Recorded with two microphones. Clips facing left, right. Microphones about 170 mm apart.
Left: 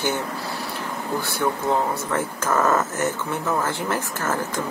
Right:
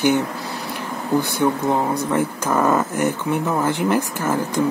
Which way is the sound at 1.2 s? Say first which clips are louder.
Right 6 dB; 15° right (ahead or behind).